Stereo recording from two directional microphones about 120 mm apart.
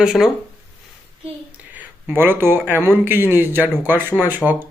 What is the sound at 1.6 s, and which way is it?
Speech, 15° right (ahead or behind).